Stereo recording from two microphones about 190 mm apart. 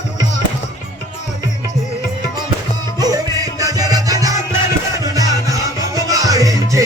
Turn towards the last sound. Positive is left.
turn(degrees=-20)  # may be behind; listen again after turning